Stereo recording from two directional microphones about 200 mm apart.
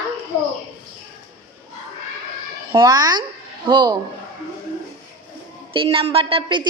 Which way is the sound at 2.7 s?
20° right (ahead or behind).